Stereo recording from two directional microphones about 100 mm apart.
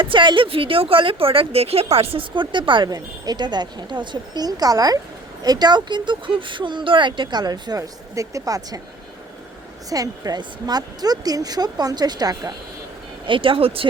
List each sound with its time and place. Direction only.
0.0 s speech: 55° right (ahead or behind); by 8.8 s 35° right (ahead or behind)
9.9 s speech: 40° right (ahead or behind)
13.2 s speech: 60° right (ahead or behind)